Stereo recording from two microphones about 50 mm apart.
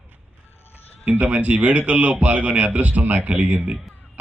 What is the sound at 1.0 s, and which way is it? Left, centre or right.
A man's voice, right.